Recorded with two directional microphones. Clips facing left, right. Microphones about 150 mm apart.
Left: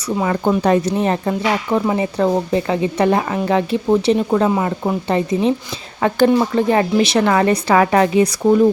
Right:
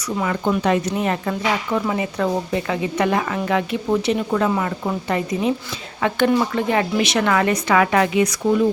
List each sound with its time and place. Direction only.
0.2 s speech: 30° left (ahead or behind)